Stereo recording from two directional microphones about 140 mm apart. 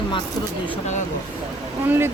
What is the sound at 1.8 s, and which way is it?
Speech, 15° right (ahead or behind).